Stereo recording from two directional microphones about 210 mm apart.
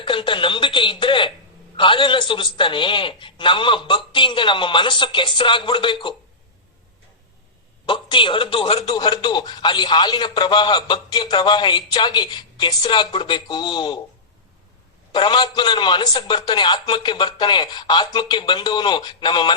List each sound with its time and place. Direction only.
0.0 s a man's voice: 25° left (ahead or behind)
7.9 s a man's voice: 25° left (ahead or behind)
15.1 s a man's voice: 20° left (ahead or behind)